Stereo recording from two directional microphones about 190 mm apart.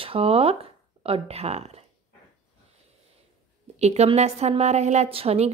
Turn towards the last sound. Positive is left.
turn(degrees=-30)  # may be behind; listen again after turning